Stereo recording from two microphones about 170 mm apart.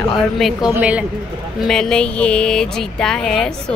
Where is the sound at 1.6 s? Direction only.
5° left (ahead or behind).